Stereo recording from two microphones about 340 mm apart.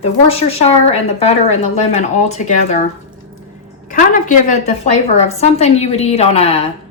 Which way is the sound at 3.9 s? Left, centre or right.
Left.